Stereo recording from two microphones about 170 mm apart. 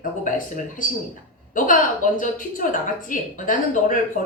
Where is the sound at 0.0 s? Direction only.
50° left (ahead or behind).